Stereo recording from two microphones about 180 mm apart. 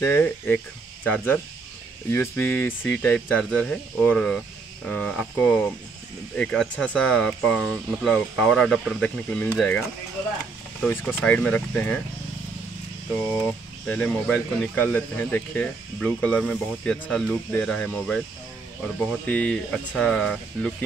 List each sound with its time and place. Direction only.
0.0 s speech: 10° left (ahead or behind)
13.5 s speech: 10° left (ahead or behind)
19.2 s speech: 5° left (ahead or behind)